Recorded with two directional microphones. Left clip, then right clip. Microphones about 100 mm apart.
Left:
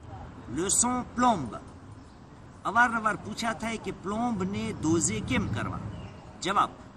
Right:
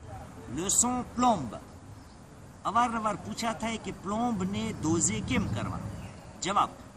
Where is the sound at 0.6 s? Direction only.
25° right (ahead or behind).